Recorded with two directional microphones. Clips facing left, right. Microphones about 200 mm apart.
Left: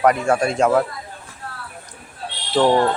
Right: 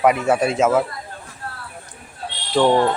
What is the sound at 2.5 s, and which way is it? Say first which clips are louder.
Speech: even; centre (ahead or behind).